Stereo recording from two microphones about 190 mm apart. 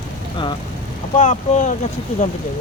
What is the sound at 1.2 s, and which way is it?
Speech, 40° left (ahead or behind).